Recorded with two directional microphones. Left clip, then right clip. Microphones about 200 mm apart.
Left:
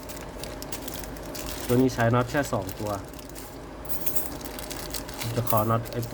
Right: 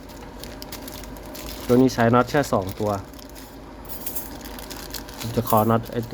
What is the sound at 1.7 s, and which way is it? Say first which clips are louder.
Speech: right 6 dB; 35° right (ahead or behind).